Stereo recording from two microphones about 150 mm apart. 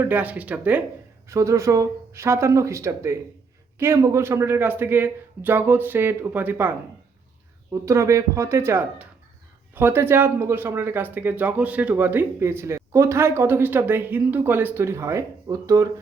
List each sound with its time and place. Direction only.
0.0 s speech: 10° right (ahead or behind)